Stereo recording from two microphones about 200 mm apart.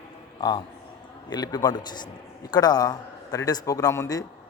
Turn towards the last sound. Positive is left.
turn(degrees=15)  # may be behind; listen again after turning